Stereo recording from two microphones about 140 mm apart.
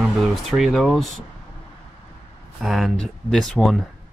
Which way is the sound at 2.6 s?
Centre (ahead or behind).